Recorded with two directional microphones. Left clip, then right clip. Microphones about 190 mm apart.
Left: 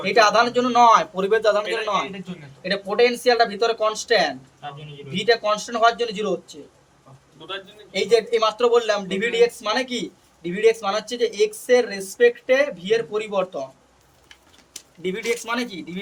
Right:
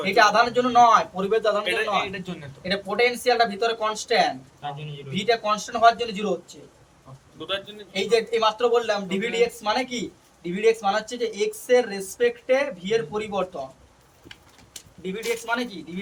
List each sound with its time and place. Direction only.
0.0 s speech: 45° left (ahead or behind)
2.6 s speech: 45° left (ahead or behind)
7.9 s speech: 50° left (ahead or behind)
15.0 s a man's voice: 60° left (ahead or behind)